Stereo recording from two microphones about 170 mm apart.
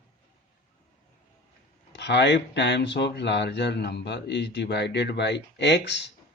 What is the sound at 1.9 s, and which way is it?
Speech, 90° left.